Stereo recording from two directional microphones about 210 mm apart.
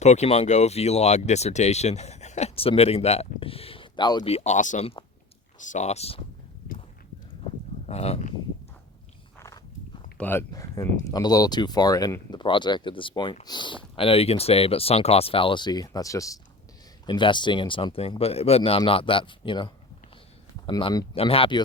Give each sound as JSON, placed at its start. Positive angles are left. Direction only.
{"t": 0.0, "sound": "speech", "side_deg": 30}
{"t": 7.9, "sound": "speech", "side_deg": 30}
{"t": 9.4, "sound": "walk", "side_deg": 15}
{"t": 10.2, "sound": "speech", "side_deg": 10}